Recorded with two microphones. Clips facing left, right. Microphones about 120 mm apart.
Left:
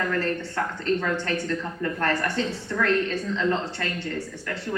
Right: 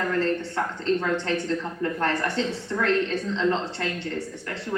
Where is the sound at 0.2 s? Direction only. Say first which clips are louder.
Right 2 dB; 20° right (ahead or behind).